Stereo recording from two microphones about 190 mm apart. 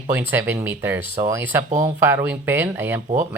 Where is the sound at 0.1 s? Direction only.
10° right (ahead or behind).